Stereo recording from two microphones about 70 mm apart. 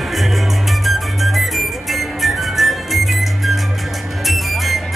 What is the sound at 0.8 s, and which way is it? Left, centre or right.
Music, centre.